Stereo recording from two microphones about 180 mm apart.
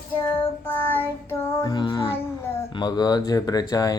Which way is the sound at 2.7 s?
25° left (ahead or behind).